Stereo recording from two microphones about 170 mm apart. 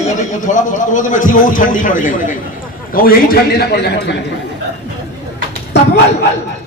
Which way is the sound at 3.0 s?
65° left (ahead or behind).